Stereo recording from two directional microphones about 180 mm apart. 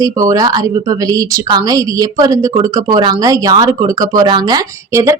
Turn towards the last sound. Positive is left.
turn(degrees=-20)  # may be behind; listen again after turning